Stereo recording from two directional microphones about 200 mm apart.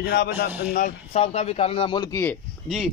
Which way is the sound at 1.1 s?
30° left (ahead or behind).